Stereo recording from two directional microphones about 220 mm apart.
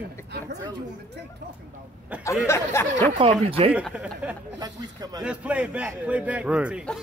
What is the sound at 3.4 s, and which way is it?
Speech, 25° right (ahead or behind).